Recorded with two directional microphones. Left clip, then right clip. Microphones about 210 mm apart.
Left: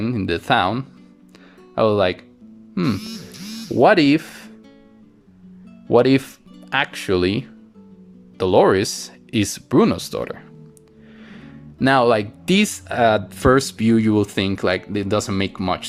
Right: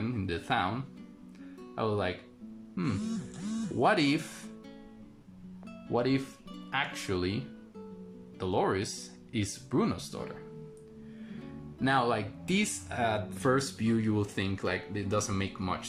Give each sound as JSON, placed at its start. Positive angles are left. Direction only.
{"t": 0.0, "sound": "speech", "side_deg": 50}
{"t": 3.8, "sound": "speech", "side_deg": 45}
{"t": 5.9, "sound": "speech", "side_deg": 50}
{"t": 11.8, "sound": "speech", "side_deg": 50}